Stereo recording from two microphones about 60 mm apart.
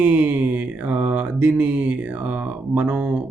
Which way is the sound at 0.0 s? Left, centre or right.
Right.